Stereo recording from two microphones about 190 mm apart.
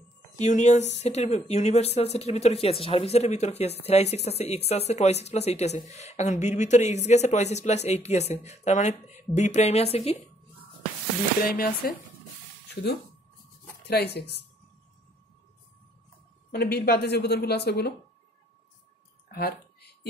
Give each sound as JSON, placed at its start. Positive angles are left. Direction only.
{"t": 0.4, "sound": "speech", "side_deg": 40}
{"t": 11.4, "sound": "speech", "side_deg": 50}
{"t": 13.8, "sound": "a woman's voice", "side_deg": 60}
{"t": 16.5, "sound": "a woman's voice", "side_deg": 55}